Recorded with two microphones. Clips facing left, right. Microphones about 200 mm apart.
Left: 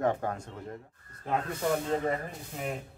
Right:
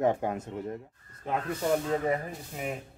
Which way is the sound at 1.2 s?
Centre (ahead or behind).